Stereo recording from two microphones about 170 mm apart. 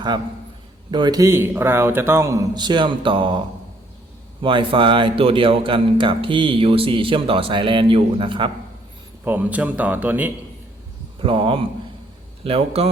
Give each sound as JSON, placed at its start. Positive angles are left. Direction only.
{"t": 0.9, "sound": "speech", "side_deg": -25}
{"t": 4.4, "sound": "a man's voice", "side_deg": -30}
{"t": 9.2, "sound": "a man's voice", "side_deg": -10}
{"t": 11.2, "sound": "a man's voice", "side_deg": -30}